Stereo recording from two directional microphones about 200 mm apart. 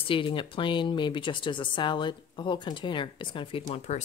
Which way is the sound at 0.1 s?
25° left (ahead or behind).